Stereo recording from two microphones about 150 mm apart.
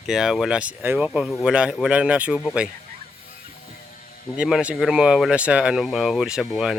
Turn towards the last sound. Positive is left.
turn(degrees=-5)  # may be behind; listen again after turning